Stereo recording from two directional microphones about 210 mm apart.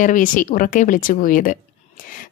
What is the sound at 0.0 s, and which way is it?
A woman's voice, 40° left (ahead or behind).